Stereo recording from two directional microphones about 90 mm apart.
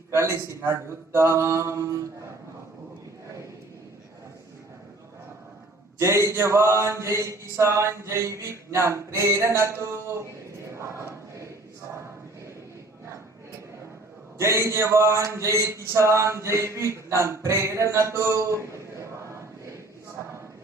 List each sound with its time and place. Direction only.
0.1 s speech: 30° right (ahead or behind)
6.0 s speech: 30° right (ahead or behind)
10.7 s choir: 30° right (ahead or behind)
14.3 s speech: 30° right (ahead or behind)
18.9 s choir: 35° right (ahead or behind)